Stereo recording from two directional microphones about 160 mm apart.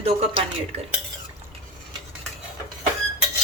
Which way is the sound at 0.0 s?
40° right (ahead or behind).